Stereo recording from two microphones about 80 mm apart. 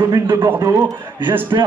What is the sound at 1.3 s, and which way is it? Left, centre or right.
Speech, right.